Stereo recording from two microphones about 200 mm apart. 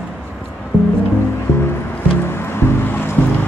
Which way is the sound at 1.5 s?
10° left (ahead or behind).